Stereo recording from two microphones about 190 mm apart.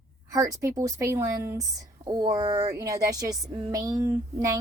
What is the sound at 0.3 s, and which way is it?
Speech, 20° right (ahead or behind).